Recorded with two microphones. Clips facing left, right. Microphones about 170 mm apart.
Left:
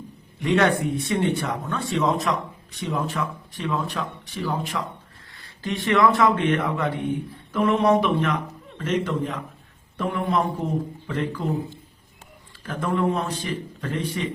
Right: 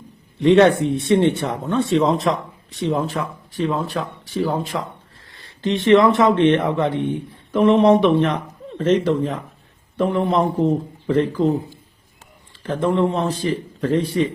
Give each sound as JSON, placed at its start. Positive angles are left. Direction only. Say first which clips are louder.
{"t": 0.3, "sound": "a man's voice", "louder": "right 8 dB", "side_deg": -30}
{"t": 5.3, "sound": "a man's voice", "louder": "right 7 dB", "side_deg": -20}
{"t": 12.6, "sound": "a man's voice", "louder": "right 5 dB", "side_deg": -25}